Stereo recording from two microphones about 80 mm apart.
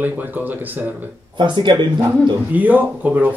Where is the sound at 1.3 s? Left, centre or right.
Right.